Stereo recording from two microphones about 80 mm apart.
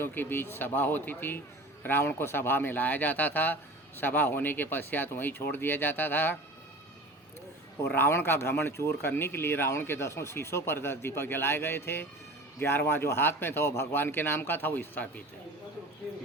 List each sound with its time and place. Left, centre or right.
0.0 s speech: left
7.9 s speech: left